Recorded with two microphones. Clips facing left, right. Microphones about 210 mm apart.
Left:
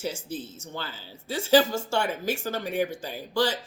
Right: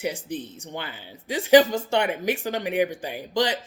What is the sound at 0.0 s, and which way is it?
Speech, 15° right (ahead or behind).